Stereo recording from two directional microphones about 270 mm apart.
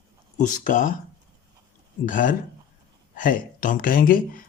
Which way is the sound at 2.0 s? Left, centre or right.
Left.